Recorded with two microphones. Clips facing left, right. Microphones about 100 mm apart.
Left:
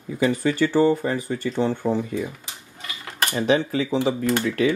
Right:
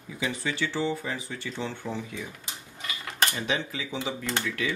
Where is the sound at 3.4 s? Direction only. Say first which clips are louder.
Left 10 dB; 40° left (ahead or behind).